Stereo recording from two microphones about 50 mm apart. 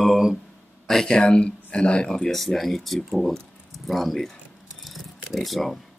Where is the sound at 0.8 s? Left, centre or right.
Centre.